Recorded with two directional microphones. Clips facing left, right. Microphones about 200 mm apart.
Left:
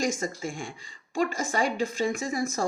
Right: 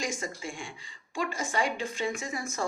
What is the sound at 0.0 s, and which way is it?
Speech, 40° left (ahead or behind).